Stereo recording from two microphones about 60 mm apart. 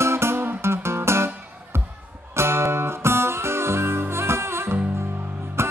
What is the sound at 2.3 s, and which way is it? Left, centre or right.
Music, right.